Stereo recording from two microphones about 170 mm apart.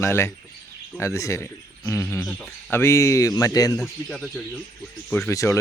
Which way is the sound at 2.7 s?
15° left (ahead or behind).